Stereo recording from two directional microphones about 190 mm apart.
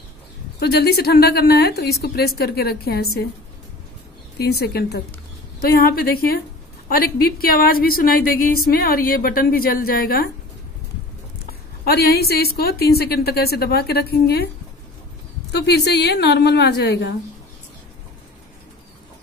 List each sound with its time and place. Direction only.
0.6 s a woman's voice: 60° left (ahead or behind)
4.4 s a woman's voice: 55° left (ahead or behind)
11.8 s a woman's voice: 55° left (ahead or behind)
15.5 s a woman's voice: 60° left (ahead or behind)